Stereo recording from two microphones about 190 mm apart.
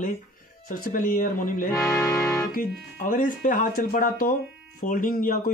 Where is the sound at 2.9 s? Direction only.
45° left (ahead or behind).